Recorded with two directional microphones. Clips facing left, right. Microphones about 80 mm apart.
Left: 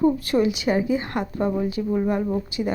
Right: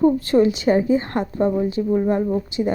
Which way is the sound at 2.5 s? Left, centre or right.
Right.